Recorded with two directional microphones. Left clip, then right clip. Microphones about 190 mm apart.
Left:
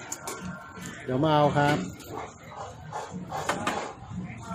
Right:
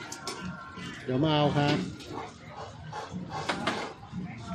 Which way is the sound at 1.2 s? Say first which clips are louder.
Left 4 dB; 20° left (ahead or behind).